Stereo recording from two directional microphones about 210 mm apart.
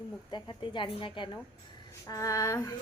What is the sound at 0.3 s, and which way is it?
A woman's voice, 20° left (ahead or behind).